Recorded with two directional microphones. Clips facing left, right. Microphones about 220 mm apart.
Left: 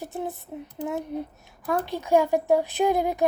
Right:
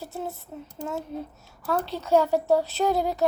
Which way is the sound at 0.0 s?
15° left (ahead or behind).